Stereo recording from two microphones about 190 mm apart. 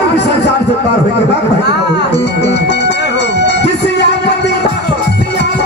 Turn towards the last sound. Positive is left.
turn(degrees=65)  # may be behind; listen again after turning